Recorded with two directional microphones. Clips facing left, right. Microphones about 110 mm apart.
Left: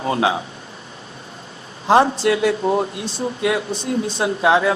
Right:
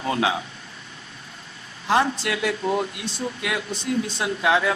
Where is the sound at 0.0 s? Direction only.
35° left (ahead or behind).